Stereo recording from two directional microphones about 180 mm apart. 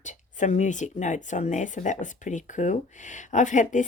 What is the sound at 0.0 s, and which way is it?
Speech, 40° left (ahead or behind).